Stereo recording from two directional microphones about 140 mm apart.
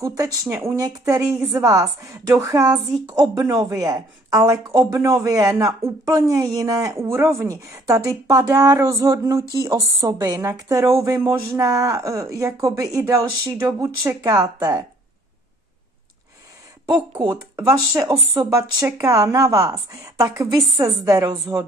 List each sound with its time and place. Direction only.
0.0 s speech: 25° right (ahead or behind)
16.8 s speech: 30° right (ahead or behind)